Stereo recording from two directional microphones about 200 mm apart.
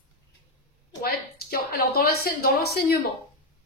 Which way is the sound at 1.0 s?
50° left (ahead or behind).